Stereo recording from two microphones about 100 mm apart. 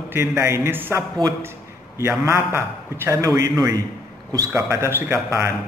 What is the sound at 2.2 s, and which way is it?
A man's voice, 25° right (ahead or behind).